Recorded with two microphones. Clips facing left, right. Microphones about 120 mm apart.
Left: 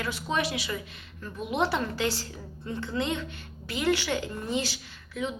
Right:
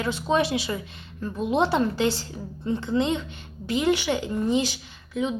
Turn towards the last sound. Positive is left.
turn(degrees=-20)  # may be behind; listen again after turning